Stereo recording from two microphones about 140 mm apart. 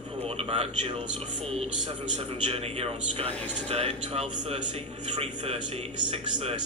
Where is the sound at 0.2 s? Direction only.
45° right (ahead or behind).